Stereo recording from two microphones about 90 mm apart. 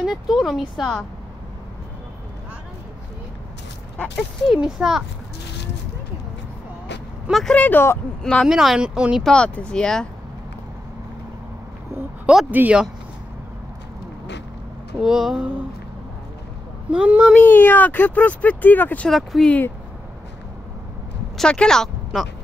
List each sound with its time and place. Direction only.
0.0 s speech: 5° right (ahead or behind)
4.5 s speech: 5° right (ahead or behind)
7.2 s speech: centre (ahead or behind)
7.5 s speech: 15° left (ahead or behind)
8.5 s speech: 5° right (ahead or behind)
9.2 s speech: 10° left (ahead or behind)
12.4 s speech: 15° right (ahead or behind)
15.0 s speech: 5° right (ahead or behind)
16.9 s speech: 10° right (ahead or behind)
17.3 s speech: 20° left (ahead or behind)
19.0 s speech: centre (ahead or behind)
21.4 s speech: 10° left (ahead or behind)